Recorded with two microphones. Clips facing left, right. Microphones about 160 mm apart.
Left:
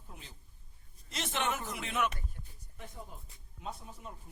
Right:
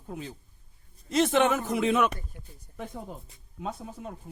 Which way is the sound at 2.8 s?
90° right.